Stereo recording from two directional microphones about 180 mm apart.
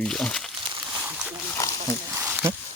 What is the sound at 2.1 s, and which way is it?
Snake, 10° right (ahead or behind).